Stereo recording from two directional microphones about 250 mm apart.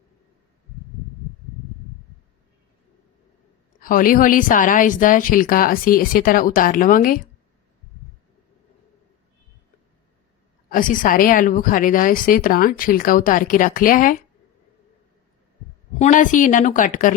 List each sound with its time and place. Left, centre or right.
3.8 s a woman's voice: left
10.7 s a woman's voice: left
16.0 s a woman's voice: left